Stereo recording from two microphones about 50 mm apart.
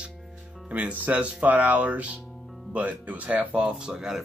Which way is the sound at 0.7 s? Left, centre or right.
Right.